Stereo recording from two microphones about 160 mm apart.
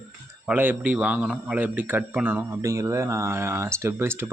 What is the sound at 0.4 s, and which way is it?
A man's voice, 10° right (ahead or behind).